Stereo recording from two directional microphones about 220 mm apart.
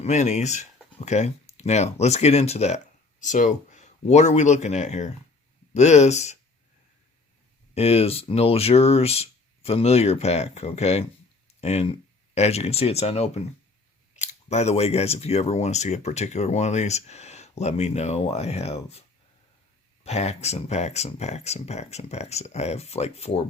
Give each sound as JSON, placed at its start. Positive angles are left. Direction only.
{"t": 0.0, "sound": "speech", "side_deg": 30}
{"t": 7.7, "sound": "speech", "side_deg": 30}
{"t": 20.1, "sound": "speech", "side_deg": 30}